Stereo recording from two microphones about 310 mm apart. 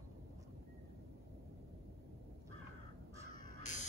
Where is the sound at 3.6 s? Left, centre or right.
Left.